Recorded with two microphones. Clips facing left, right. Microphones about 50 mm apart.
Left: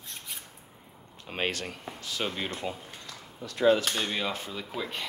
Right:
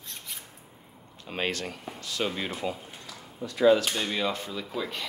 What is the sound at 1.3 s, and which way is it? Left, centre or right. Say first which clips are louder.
Speech: right 1 dB; centre.